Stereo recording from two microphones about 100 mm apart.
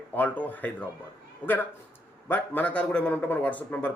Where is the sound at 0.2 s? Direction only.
15° left (ahead or behind).